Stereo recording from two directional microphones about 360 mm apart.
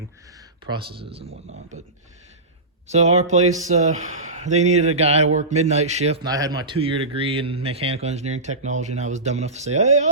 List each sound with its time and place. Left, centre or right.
0.7 s speech: centre
1.5 s speech: right
2.9 s speech: centre